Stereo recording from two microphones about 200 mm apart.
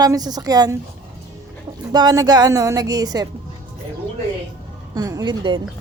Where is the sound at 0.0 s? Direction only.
20° right (ahead or behind).